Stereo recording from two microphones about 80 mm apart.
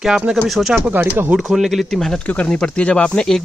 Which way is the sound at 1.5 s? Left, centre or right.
Centre.